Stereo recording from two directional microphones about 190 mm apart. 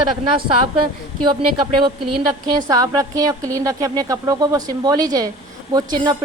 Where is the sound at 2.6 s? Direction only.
20° right (ahead or behind).